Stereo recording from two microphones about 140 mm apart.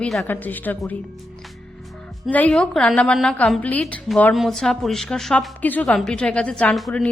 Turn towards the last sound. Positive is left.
turn(degrees=5)  # may be behind; listen again after turning